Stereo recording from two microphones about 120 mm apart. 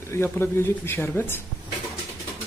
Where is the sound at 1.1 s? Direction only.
15° left (ahead or behind).